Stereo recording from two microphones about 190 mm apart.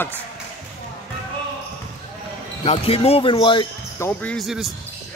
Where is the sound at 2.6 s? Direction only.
30° left (ahead or behind).